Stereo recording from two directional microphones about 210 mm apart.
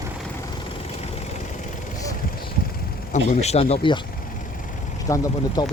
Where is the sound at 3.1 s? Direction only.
30° left (ahead or behind).